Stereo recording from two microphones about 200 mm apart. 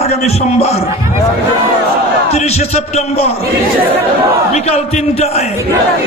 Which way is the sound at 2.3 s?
30° left (ahead or behind).